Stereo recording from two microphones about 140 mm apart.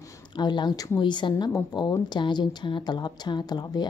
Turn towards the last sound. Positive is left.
turn(degrees=30)  # may be behind; listen again after turning